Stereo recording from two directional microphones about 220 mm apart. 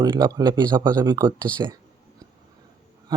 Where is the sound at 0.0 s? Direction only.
20° right (ahead or behind).